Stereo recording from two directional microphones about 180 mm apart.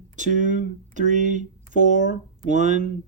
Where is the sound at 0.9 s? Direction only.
45° right (ahead or behind).